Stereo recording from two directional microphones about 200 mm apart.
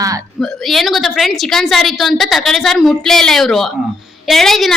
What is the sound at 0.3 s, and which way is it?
A woman's voice, centre (ahead or behind).